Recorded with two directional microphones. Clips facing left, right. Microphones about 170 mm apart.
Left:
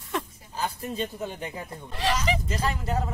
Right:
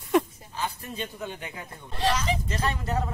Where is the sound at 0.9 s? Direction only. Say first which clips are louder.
Left 3 dB; 35° left (ahead or behind).